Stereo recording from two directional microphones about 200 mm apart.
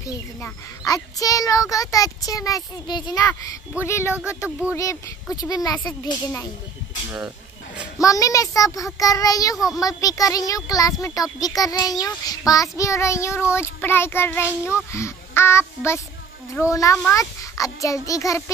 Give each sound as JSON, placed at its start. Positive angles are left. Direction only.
{"t": 0.0, "sound": "child singing", "side_deg": 15}
{"t": 4.7, "sound": "speech", "side_deg": 15}
{"t": 8.0, "sound": "child singing", "side_deg": 15}